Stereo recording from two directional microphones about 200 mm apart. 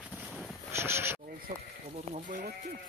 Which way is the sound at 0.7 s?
15° right (ahead or behind).